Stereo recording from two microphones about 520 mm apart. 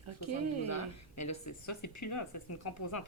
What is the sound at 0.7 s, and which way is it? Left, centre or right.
Speech, left.